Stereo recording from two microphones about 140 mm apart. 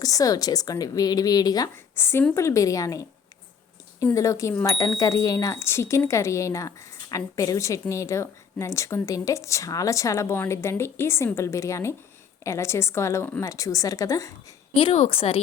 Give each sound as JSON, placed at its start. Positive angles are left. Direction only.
{"t": 0.0, "sound": "speech", "side_deg": 25}
{"t": 2.0, "sound": "speech", "side_deg": 15}
{"t": 14.8, "sound": "a woman's voice", "side_deg": 45}